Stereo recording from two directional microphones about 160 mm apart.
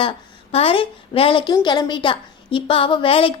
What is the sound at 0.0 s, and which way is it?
A woman's voice, 35° left (ahead or behind).